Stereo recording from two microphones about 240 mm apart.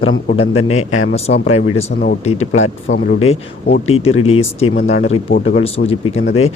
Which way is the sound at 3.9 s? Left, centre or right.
Left.